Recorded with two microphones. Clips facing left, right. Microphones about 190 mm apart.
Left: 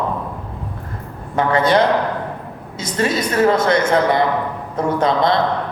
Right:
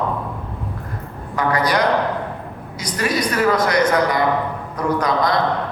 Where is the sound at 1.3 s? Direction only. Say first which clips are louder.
Left 4 dB; 25° left (ahead or behind).